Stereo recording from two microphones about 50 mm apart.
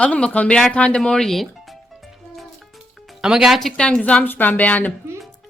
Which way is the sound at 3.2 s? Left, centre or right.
Centre.